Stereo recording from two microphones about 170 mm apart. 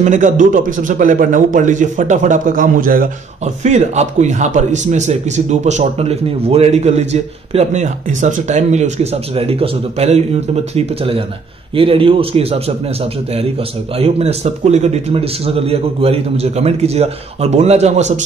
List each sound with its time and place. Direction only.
0.0 s a man's voice: 50° right (ahead or behind)
3.6 s a man's voice: 45° right (ahead or behind)
13.9 s a man's voice: 35° right (ahead or behind)